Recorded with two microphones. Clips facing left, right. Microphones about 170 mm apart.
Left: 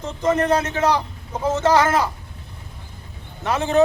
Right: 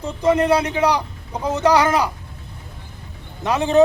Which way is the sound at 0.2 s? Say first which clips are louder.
Right 2 dB; 10° right (ahead or behind).